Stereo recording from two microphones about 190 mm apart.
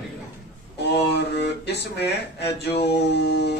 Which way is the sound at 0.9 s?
60° left (ahead or behind).